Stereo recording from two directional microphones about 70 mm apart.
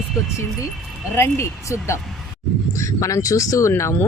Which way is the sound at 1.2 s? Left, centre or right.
Left.